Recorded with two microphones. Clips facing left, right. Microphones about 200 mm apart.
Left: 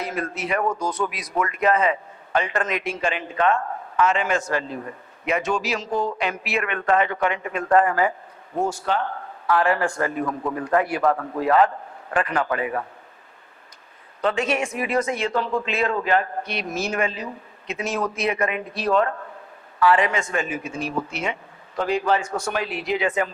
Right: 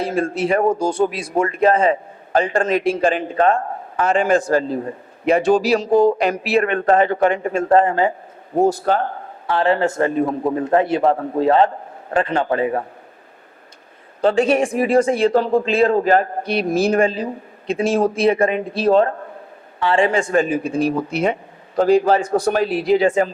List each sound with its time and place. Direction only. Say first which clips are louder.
0.0 s a man's voice: right 8 dB; 30° right (ahead or behind)
9.5 s a man's voice: right 3 dB; 25° right (ahead or behind)
14.2 s speech: right 8 dB; 30° right (ahead or behind)